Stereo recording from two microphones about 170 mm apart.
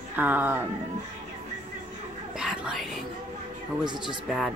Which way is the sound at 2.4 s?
5° right (ahead or behind).